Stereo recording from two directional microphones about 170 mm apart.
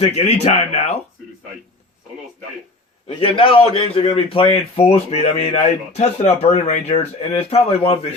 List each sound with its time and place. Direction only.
0.0 s speech: 35° left (ahead or behind)
3.2 s speech: 30° left (ahead or behind)